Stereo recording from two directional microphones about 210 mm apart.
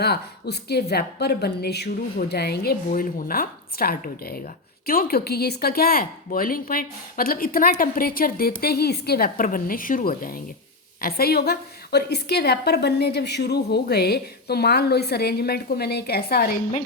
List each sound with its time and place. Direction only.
0.0 s a woman's voice: 50° left (ahead or behind)